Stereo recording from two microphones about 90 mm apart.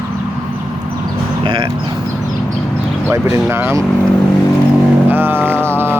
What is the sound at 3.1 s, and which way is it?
Speech, 25° right (ahead or behind).